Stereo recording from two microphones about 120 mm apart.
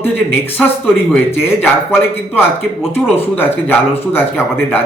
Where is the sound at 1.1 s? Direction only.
15° left (ahead or behind).